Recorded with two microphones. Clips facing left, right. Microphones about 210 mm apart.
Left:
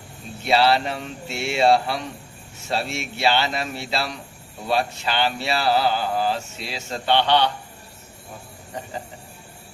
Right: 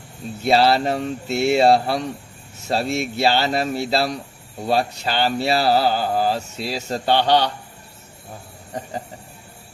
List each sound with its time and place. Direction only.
0.4 s speech: 40° right (ahead or behind)